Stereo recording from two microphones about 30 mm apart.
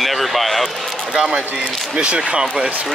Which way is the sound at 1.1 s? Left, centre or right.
Right.